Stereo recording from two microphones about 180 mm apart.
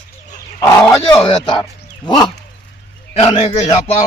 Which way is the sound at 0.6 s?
25° left (ahead or behind).